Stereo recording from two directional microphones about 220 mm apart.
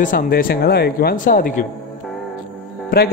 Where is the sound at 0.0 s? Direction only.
40° left (ahead or behind).